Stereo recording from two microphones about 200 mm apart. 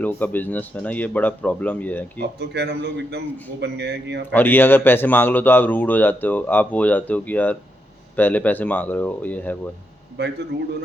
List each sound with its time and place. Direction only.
0.0 s speech: 10° left (ahead or behind)
2.1 s a man's voice: 55° right (ahead or behind)
4.3 s speech: 10° left (ahead or behind)
10.2 s a man's voice: 55° right (ahead or behind)